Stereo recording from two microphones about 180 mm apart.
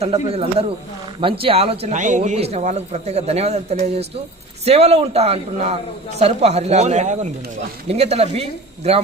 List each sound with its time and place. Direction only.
0.0 s a man's voice: 35° right (ahead or behind)